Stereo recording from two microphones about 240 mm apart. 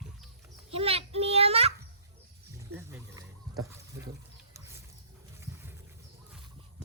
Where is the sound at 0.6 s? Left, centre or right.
Right.